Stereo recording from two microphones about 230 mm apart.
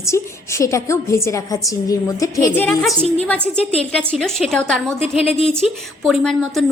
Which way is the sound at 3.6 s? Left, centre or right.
Left.